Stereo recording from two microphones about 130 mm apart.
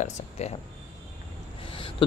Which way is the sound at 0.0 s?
55° left (ahead or behind).